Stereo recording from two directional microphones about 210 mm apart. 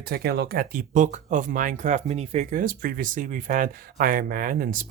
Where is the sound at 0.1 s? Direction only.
50° right (ahead or behind).